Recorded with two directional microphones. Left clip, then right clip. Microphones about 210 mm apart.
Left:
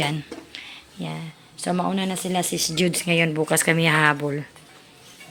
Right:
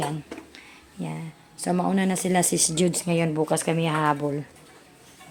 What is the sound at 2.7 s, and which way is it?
Speech, 5° right (ahead or behind).